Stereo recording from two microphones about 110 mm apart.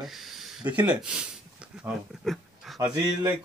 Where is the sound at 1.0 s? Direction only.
10° right (ahead or behind).